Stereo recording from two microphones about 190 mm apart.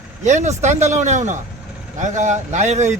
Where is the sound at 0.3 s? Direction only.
40° right (ahead or behind).